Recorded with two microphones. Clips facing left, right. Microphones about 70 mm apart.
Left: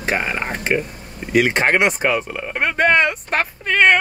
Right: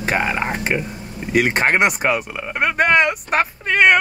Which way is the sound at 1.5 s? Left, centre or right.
Right.